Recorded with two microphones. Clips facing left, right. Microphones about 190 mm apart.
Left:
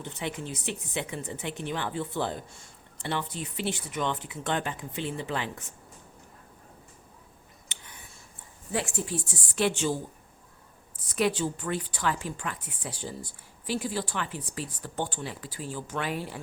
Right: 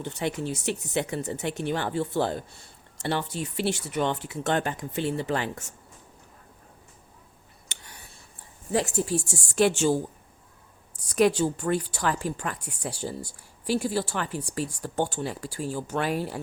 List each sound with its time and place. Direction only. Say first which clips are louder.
0.0 s speech: right 5 dB; 40° right (ahead or behind)
8.7 s a woman's voice: right 6 dB; 40° right (ahead or behind)
11.1 s a woman's voice: right 5 dB; 45° right (ahead or behind)